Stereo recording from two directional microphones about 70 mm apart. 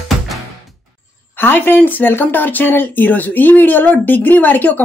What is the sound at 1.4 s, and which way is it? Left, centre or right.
A woman's voice, left.